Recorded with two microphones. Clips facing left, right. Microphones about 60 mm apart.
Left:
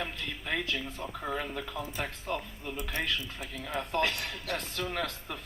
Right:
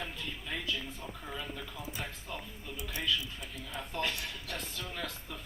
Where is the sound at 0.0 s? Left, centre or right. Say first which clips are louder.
Left 4 dB; left.